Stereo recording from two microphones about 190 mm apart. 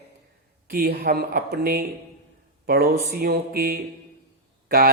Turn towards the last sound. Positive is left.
turn(degrees=-50)  # may be behind; listen again after turning